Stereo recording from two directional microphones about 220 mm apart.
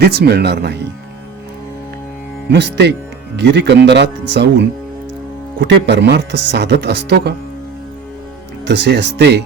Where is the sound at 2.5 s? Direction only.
50° right (ahead or behind).